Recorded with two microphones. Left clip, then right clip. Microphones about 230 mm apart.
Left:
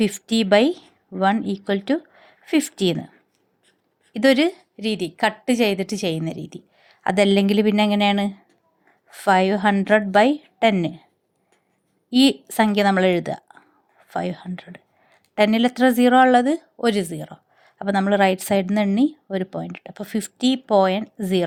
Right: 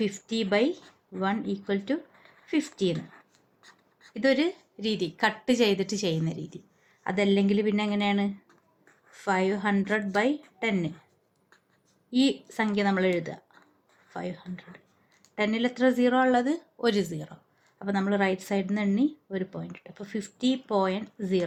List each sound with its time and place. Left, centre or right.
0.0 s a woman's voice: left
4.1 s a woman's voice: left
12.1 s a woman's voice: left